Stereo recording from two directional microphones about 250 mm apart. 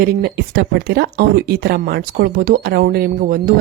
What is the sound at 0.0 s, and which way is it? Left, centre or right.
Speech, right.